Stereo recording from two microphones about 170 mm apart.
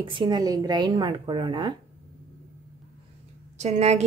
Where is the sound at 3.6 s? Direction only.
40° right (ahead or behind).